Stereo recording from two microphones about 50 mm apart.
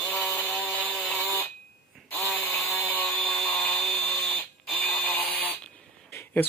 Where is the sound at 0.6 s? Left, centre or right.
Left.